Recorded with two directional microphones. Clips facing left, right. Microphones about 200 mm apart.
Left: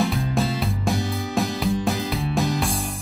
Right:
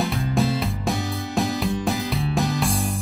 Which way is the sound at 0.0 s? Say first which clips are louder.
Even; centre (ahead or behind).